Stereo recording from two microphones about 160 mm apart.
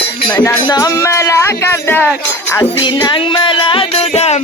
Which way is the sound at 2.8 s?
30° left (ahead or behind).